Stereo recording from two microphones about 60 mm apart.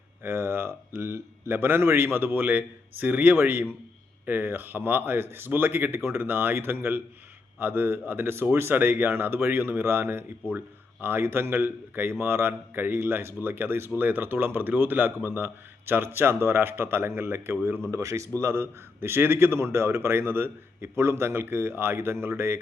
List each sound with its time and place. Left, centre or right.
0.2 s a man's voice: right
17.9 s a man's voice: right